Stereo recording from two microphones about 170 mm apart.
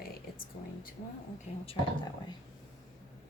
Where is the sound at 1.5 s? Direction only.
40° left (ahead or behind).